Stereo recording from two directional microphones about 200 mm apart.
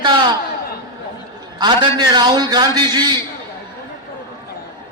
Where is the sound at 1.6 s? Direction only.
20° right (ahead or behind).